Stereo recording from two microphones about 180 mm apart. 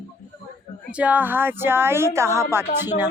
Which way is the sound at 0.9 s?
10° right (ahead or behind).